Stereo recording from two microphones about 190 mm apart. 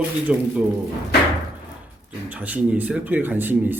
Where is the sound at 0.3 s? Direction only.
5° right (ahead or behind).